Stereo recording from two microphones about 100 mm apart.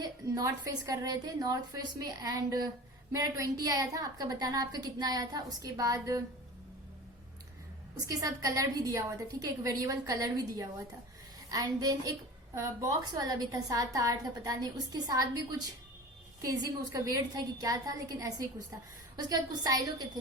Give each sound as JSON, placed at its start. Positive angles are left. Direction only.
{"t": 0.0, "sound": "a woman's voice", "side_deg": -35}
{"t": 8.0, "sound": "a woman's voice", "side_deg": -35}